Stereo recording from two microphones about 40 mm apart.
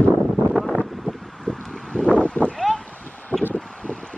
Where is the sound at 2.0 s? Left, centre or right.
Left.